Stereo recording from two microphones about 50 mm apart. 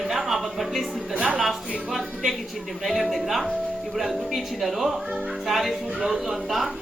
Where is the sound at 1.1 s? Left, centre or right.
Right.